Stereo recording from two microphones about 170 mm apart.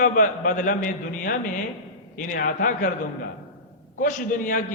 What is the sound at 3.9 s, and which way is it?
Speech, 50° left (ahead or behind).